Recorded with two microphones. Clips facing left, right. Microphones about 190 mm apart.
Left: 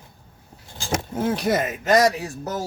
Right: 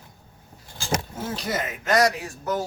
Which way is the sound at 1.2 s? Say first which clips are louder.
Left 7 dB; 55° left (ahead or behind).